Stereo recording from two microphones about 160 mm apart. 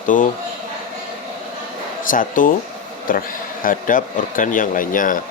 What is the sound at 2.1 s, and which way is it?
Speech, 55° left (ahead or behind).